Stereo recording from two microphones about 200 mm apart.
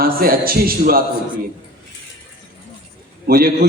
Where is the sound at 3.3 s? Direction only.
45° right (ahead or behind).